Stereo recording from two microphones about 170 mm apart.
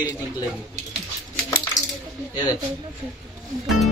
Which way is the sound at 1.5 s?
15° left (ahead or behind).